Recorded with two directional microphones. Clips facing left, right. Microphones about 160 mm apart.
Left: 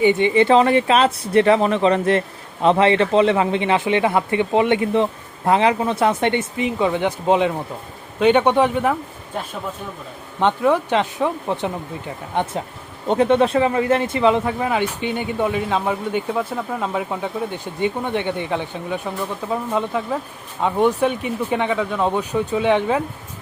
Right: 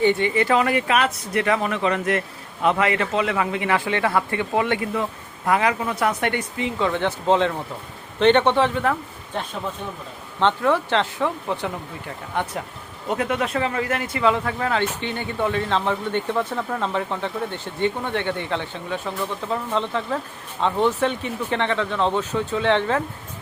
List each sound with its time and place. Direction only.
0.0 s speech: 20° left (ahead or behind)
10.4 s speech: 15° left (ahead or behind)